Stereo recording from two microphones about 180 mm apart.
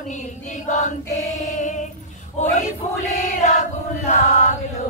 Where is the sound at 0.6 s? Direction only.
45° left (ahead or behind).